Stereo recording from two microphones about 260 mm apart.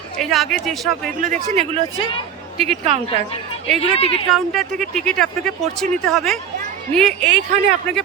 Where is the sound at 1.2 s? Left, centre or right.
Right.